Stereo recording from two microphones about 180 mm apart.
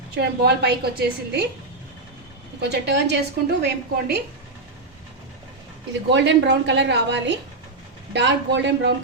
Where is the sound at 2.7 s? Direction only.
70° right (ahead or behind).